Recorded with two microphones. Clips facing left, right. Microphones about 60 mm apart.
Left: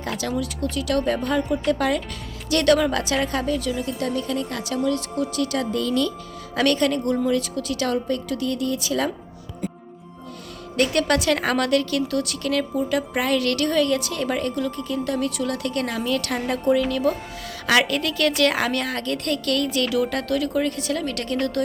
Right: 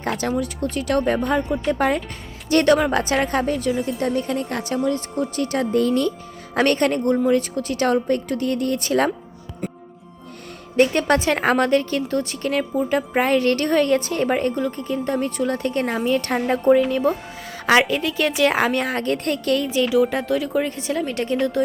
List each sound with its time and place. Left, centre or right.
0.0 s a woman's voice: right
4.7 s speech: right
10.8 s a woman's voice: right